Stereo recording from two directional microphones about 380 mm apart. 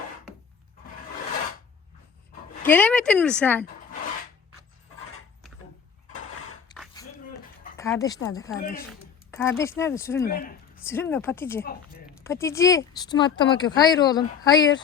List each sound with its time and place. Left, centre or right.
2.6 s speech: centre
6.7 s a sound: centre
7.8 s speech: centre
8.6 s speech: left
8.9 s speech: centre
10.2 s speech: left
10.8 s speech: centre